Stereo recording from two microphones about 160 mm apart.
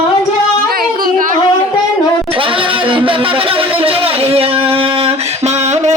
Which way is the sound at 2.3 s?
35° right (ahead or behind).